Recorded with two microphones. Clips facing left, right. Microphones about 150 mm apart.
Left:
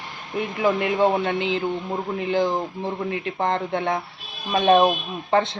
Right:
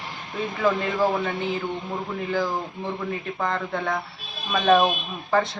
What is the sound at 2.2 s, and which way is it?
Speech, 20° left (ahead or behind).